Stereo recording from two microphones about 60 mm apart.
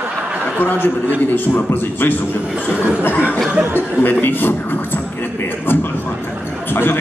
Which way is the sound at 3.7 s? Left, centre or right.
Left.